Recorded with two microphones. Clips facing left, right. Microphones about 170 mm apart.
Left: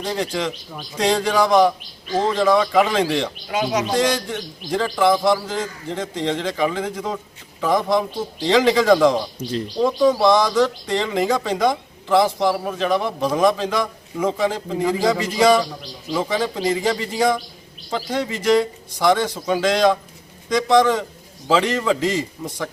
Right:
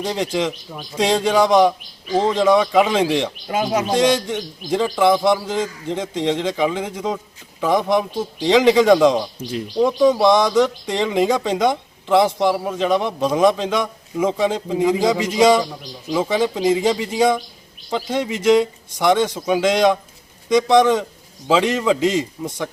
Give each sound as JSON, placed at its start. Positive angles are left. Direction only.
{"t": 0.0, "sound": "a man's voice", "side_deg": -20}
{"t": 3.5, "sound": "speech", "side_deg": -50}
{"t": 3.9, "sound": "a man's voice", "side_deg": -20}